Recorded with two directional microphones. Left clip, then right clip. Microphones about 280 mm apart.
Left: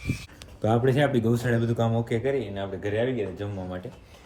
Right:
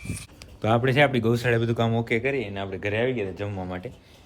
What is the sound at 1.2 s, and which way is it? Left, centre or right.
Speech, centre.